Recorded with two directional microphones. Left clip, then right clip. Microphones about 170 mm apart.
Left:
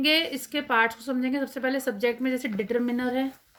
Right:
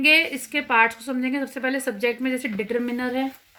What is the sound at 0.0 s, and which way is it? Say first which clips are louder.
Speech: right 6 dB; 5° right (ahead or behind).